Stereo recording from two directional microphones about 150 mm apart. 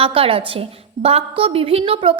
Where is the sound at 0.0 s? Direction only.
35° right (ahead or behind).